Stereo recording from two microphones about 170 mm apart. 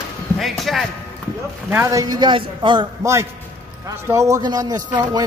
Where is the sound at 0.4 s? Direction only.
Centre (ahead or behind).